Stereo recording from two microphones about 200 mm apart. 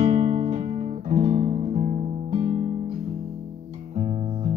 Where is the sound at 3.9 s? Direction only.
35° right (ahead or behind).